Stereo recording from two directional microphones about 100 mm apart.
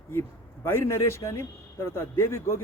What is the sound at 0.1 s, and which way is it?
Speech, 25° left (ahead or behind).